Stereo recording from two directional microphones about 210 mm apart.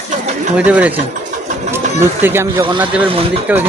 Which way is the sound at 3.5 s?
5° right (ahead or behind).